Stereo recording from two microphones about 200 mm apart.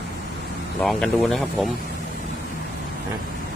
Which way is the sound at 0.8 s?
5° left (ahead or behind).